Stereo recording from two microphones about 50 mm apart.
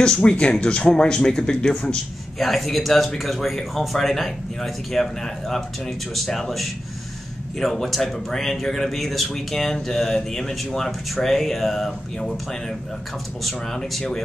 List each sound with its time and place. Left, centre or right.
0.0 s speech: centre
2.3 s speech: centre
13.9 s speech: centre